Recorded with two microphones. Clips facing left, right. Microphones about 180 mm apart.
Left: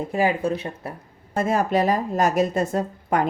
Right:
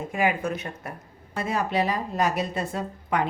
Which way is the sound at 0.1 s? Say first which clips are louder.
Left 3 dB; 35° left (ahead or behind).